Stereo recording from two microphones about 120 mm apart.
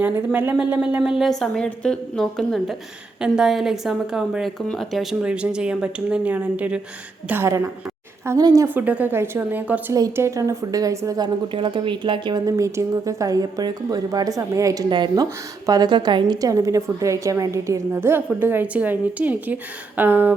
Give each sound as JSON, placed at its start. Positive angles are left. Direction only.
{"t": 0.7, "sound": "a woman's voice", "side_deg": -15}
{"t": 5.2, "sound": "speech", "side_deg": -10}
{"t": 7.3, "sound": "a woman's voice", "side_deg": -20}
{"t": 9.9, "sound": "a woman's voice", "side_deg": -25}
{"t": 11.5, "sound": "speech", "side_deg": -40}
{"t": 12.5, "sound": "a woman's voice", "side_deg": -25}
{"t": 14.8, "sound": "a woman's voice", "side_deg": -40}